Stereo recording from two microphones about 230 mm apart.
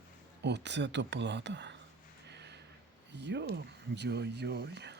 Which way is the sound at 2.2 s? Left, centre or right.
Right.